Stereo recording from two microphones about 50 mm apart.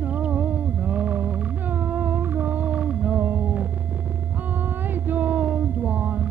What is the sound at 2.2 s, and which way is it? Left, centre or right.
Humming, right.